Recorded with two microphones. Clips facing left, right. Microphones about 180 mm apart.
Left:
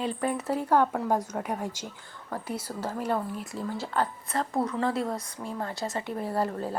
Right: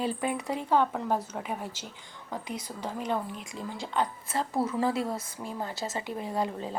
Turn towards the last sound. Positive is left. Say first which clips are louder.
# left 2 dB
turn(degrees=5)  # may be behind; listen again after turning